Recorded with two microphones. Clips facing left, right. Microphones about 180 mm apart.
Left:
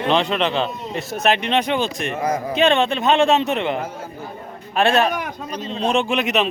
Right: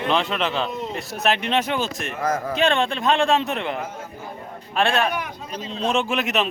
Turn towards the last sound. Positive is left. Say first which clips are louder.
# left 3 dB
turn(degrees=0)  # may be behind; listen again after turning